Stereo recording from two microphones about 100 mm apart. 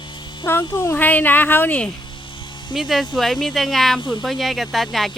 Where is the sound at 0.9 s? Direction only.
20° left (ahead or behind).